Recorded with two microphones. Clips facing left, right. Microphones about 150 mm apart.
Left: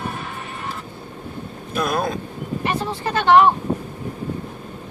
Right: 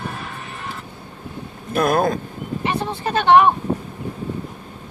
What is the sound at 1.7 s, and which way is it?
Vehicle, 50° right (ahead or behind).